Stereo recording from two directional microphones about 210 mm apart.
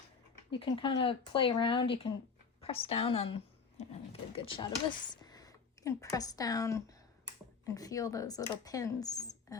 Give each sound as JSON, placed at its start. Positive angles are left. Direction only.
{"t": 0.5, "sound": "speech", "side_deg": 25}